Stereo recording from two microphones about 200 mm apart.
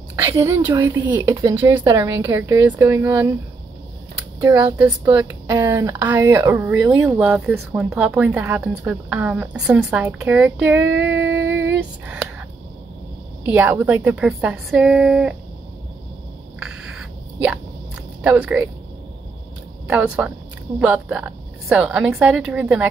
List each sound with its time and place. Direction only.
0.1 s a woman's voice: 20° right (ahead or behind)
0.5 s a woman's voice: 10° right (ahead or behind)
4.7 s a woman's voice: 10° right (ahead or behind)
13.5 s a woman's voice: 10° right (ahead or behind)
16.5 s hiccup: 5° right (ahead or behind)
18.2 s a woman's voice: 5° right (ahead or behind)
19.9 s a woman's voice: 5° right (ahead or behind)